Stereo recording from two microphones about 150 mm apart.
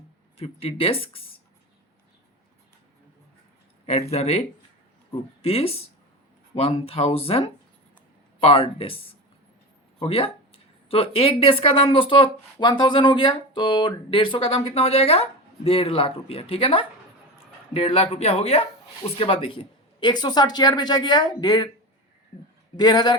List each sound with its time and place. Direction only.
0.3 s speech: 40° left (ahead or behind)
3.8 s speech: 45° left (ahead or behind)
22.8 s speech: 30° left (ahead or behind)